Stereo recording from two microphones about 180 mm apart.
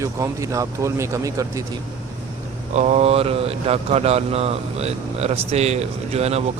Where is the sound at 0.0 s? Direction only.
15° right (ahead or behind).